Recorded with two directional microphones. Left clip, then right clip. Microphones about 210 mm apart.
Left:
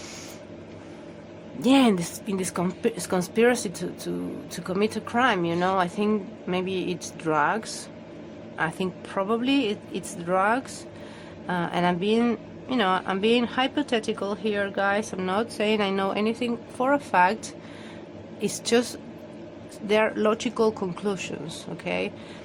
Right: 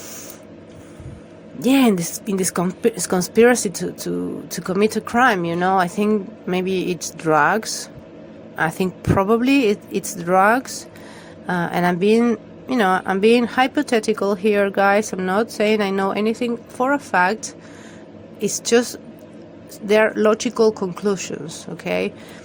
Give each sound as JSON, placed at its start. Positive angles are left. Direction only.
{"t": 1.6, "sound": "a woman's voice", "side_deg": -15}